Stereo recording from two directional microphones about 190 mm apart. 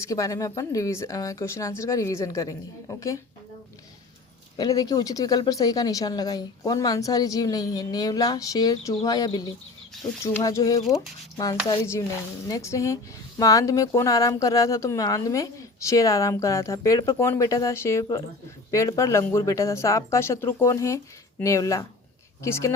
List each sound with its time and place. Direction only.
0.0 s speech: 15° left (ahead or behind)
4.5 s speech: 20° left (ahead or behind)